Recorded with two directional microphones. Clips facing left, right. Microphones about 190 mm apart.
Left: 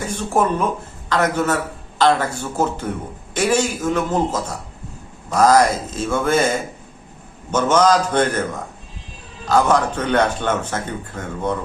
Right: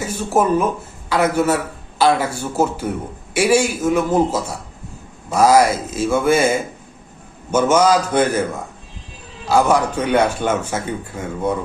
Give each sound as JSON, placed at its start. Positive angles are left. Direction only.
{"t": 0.0, "sound": "speech", "side_deg": -5}
{"t": 9.5, "sound": "speech", "side_deg": -10}